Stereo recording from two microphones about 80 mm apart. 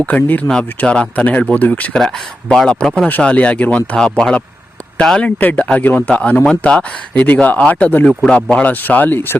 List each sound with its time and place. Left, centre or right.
0.0 s a man's voice: centre
1.9 s speech: centre
3.1 s a man's voice: centre
8.0 s a man's voice: centre; by 9.4 s left